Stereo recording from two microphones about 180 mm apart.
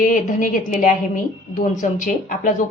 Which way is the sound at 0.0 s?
45° left (ahead or behind).